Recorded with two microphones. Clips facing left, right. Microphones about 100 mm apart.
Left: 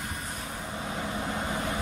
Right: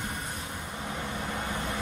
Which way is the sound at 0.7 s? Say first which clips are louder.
Left 2 dB; 20° left (ahead or behind).